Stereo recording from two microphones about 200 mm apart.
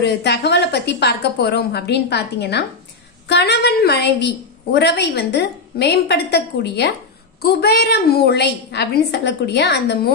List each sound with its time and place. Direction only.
0.0 s a woman's voice: 55° left (ahead or behind)